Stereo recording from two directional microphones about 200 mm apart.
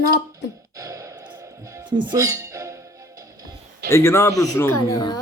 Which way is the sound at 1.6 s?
20° right (ahead or behind).